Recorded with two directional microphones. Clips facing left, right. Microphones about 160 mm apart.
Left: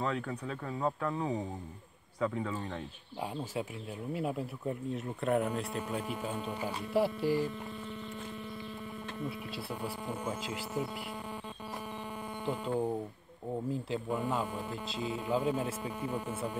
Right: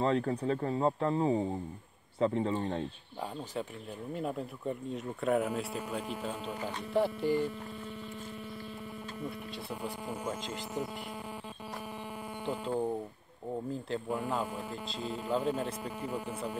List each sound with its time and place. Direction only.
0.0 s speech: 30° right (ahead or behind)
4.1 s speech: 5° left (ahead or behind)
12.4 s speech: centre (ahead or behind)